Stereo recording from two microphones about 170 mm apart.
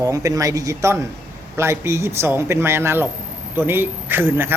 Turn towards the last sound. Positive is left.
turn(degrees=-15)  # may be behind; listen again after turning